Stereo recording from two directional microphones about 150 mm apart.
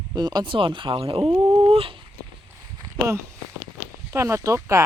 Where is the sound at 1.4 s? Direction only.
25° right (ahead or behind).